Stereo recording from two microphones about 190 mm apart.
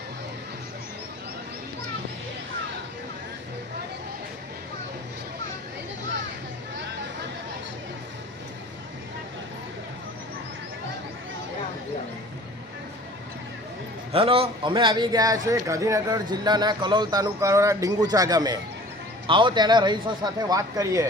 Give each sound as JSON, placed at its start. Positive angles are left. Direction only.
{"t": 14.1, "sound": "a man's voice", "side_deg": -30}